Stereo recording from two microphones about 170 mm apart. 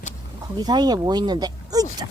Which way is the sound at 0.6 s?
25° right (ahead or behind).